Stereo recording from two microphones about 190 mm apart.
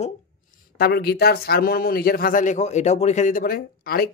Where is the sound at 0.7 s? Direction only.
55° left (ahead or behind).